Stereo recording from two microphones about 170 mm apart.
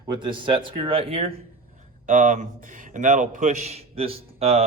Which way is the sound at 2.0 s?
50° right (ahead or behind).